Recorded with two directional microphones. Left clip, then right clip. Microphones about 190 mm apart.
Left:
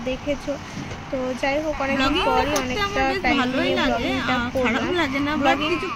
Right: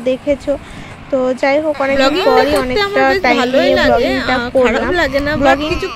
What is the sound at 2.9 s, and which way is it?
Speech, 25° right (ahead or behind).